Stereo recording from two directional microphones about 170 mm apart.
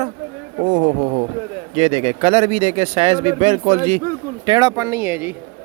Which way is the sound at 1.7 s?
40° right (ahead or behind).